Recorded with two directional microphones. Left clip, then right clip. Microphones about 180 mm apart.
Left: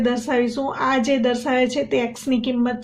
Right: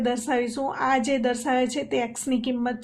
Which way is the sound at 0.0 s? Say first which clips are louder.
Left 4 dB; 40° right (ahead or behind).